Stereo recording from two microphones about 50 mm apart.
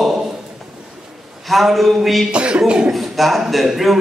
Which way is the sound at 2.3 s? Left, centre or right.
Centre.